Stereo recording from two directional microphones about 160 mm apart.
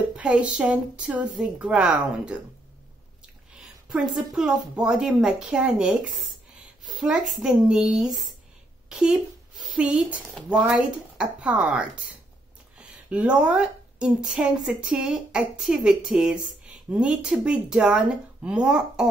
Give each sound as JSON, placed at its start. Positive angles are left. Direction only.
{"t": 0.1, "sound": "a woman's voice", "side_deg": -5}
{"t": 3.9, "sound": "a woman's voice", "side_deg": -5}
{"t": 8.8, "sound": "a sound", "side_deg": -5}
{"t": 9.8, "sound": "a woman's voice", "side_deg": -5}